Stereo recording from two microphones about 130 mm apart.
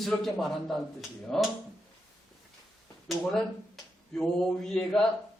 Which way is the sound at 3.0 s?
Centre (ahead or behind).